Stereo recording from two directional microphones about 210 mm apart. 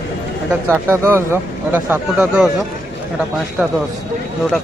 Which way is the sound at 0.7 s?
10° right (ahead or behind).